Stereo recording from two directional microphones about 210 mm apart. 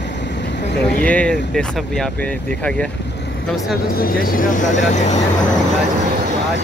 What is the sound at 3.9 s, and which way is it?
Speech, 40° left (ahead or behind).